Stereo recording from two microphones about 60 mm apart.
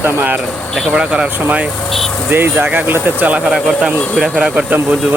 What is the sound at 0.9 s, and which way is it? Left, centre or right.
Speech, centre.